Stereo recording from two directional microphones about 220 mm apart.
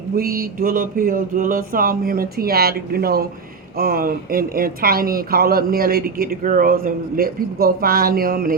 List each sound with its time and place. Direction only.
0.2 s speech: 40° right (ahead or behind)